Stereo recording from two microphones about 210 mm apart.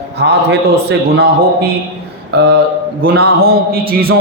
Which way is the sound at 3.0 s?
45° right (ahead or behind).